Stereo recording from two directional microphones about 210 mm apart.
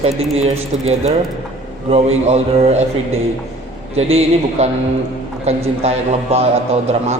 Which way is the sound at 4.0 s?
30° right (ahead or behind).